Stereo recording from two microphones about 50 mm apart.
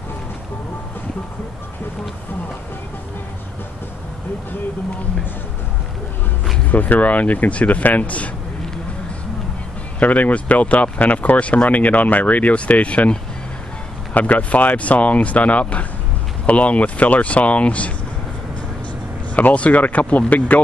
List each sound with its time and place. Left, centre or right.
6.7 s speech: left
9.9 s speech: left
19.3 s speech: left